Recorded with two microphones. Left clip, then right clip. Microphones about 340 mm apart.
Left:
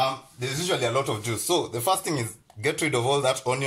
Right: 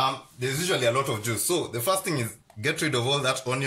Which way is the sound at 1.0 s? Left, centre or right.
Centre.